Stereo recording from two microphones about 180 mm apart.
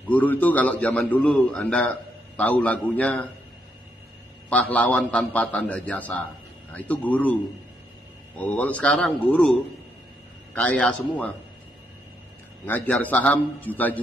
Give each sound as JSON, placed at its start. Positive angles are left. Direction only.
{"t": 0.1, "sound": "a man's voice", "side_deg": 10}
{"t": 4.5, "sound": "a man's voice", "side_deg": 10}
{"t": 8.4, "sound": "a man's voice", "side_deg": 10}
{"t": 12.6, "sound": "a man's voice", "side_deg": 10}